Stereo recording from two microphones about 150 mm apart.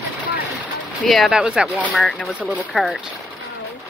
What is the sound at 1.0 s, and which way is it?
Speech, centre (ahead or behind).